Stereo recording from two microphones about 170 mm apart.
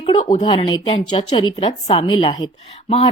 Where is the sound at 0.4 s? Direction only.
25° left (ahead or behind).